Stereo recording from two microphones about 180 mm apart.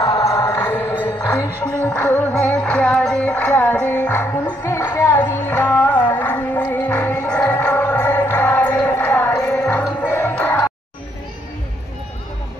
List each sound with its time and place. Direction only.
0.0 s music: 15° left (ahead or behind)